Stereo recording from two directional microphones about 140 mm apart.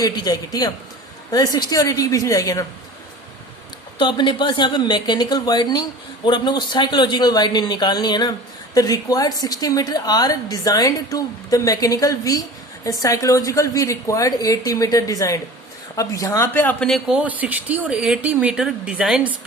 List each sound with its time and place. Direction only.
0.0 s speech: 25° left (ahead or behind)
3.9 s speech: 35° left (ahead or behind); by 17.2 s 5° left (ahead or behind)
17.2 s speech: 10° right (ahead or behind)